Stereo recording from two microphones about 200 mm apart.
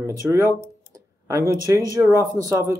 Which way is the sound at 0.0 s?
15° right (ahead or behind).